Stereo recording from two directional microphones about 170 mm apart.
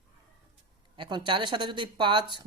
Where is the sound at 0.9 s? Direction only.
30° right (ahead or behind).